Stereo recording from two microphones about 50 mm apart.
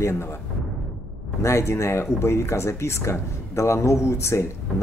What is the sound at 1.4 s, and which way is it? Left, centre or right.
Speech, left.